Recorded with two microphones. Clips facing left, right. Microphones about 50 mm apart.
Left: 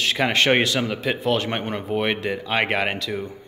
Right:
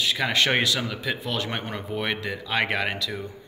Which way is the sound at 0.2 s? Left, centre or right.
Left.